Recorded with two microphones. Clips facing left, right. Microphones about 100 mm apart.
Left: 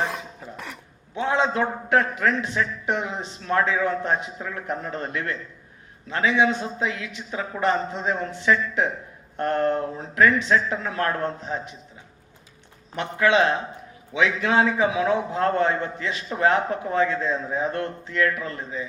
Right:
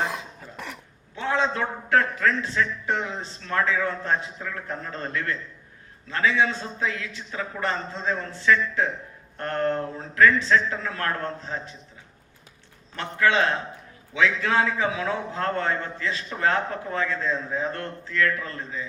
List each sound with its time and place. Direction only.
0.0 s cough: centre (ahead or behind)
1.1 s a man's voice: 20° left (ahead or behind)
13.0 s a man's voice: 20° left (ahead or behind)